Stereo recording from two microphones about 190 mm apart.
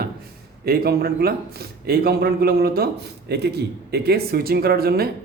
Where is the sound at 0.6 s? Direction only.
55° right (ahead or behind).